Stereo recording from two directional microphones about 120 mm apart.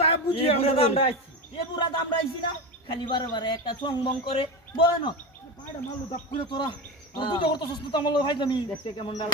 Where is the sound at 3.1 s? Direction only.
40° left (ahead or behind).